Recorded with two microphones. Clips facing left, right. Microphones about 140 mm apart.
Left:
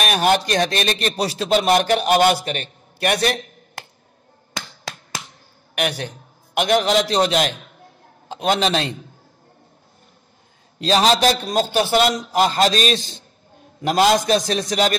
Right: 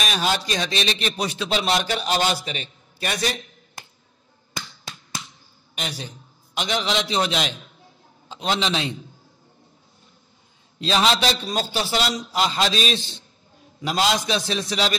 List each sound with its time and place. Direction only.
0.0 s a man's voice: 55° left (ahead or behind)
4.6 s finger snapping: 90° left
5.8 s a man's voice: 65° left (ahead or behind); by 8.8 s 50° left (ahead or behind)
10.8 s a man's voice: 40° left (ahead or behind)